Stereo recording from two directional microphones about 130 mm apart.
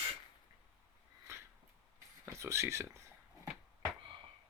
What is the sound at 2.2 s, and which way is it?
Speech, 20° right (ahead or behind).